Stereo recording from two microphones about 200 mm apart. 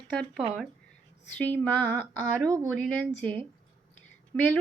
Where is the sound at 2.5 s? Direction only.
15° right (ahead or behind).